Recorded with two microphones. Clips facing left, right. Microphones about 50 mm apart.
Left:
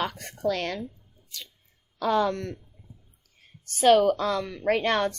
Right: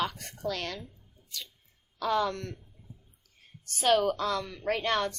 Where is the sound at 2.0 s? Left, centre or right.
Left.